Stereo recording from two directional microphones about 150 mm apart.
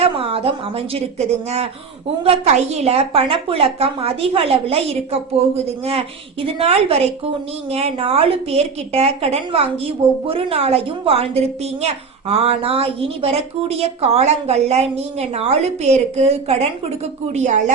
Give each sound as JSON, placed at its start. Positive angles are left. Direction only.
{"t": 0.0, "sound": "a woman's voice", "side_deg": -40}
{"t": 2.2, "sound": "a woman's voice", "side_deg": -45}